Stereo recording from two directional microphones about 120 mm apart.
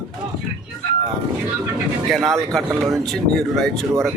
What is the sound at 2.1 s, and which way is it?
Speech, centre (ahead or behind).